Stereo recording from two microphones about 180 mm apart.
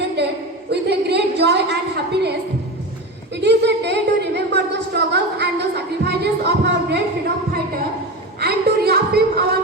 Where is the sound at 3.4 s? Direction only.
70° right (ahead or behind).